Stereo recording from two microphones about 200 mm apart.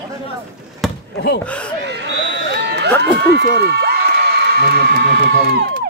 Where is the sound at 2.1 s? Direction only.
65° right (ahead or behind).